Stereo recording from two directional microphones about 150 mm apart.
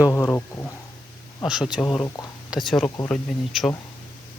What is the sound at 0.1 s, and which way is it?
Speech, 15° left (ahead or behind).